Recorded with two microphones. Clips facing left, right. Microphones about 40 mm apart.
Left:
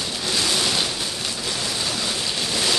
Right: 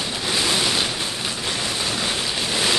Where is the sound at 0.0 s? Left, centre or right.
Centre.